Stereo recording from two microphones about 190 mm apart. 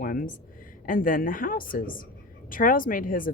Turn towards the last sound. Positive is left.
turn(degrees=45)  # may be behind; listen again after turning